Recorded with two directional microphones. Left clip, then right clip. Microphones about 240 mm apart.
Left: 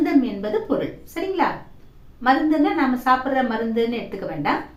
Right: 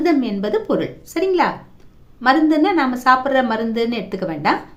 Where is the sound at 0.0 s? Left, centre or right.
Right.